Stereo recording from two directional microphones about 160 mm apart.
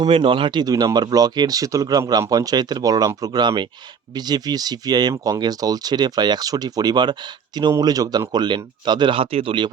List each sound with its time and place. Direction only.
0.0 s speech: 35° right (ahead or behind)